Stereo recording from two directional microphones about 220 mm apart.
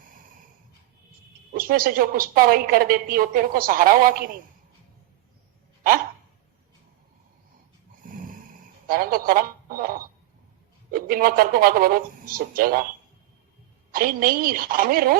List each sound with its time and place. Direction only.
1.5 s a woman's voice: 40° right (ahead or behind)
8.0 s snoring: 35° right (ahead or behind)
8.9 s a sound: 40° right (ahead or behind)
10.9 s speech: 40° right (ahead or behind)
13.9 s a woman's voice: 40° right (ahead or behind)